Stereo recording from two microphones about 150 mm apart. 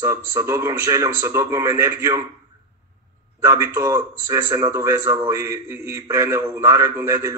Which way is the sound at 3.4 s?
15° right (ahead or behind).